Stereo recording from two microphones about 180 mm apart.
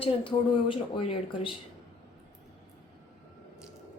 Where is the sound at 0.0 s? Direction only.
30° left (ahead or behind).